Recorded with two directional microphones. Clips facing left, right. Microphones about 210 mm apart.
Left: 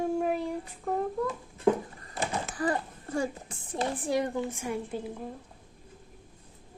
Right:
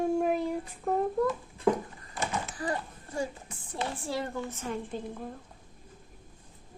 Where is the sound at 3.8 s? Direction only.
15° left (ahead or behind).